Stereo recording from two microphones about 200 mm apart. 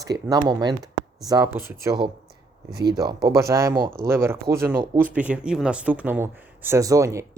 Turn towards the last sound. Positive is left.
turn(degrees=-15)  # may be behind; listen again after turning